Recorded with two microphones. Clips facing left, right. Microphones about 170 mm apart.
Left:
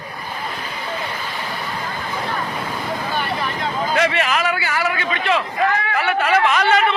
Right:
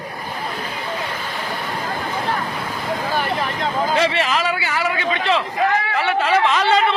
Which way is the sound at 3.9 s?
25° right (ahead or behind).